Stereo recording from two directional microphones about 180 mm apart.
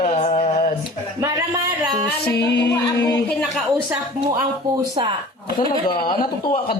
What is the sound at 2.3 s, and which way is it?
Music, 70° left (ahead or behind).